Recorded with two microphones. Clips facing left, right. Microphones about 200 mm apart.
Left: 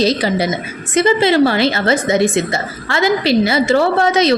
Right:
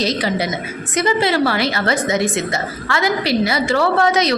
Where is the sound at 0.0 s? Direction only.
30° left (ahead or behind).